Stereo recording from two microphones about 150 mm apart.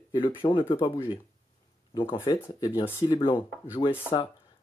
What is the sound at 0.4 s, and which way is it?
Speech, 35° left (ahead or behind).